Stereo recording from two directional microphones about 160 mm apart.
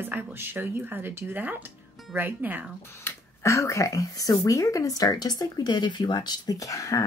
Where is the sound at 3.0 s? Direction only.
20° left (ahead or behind).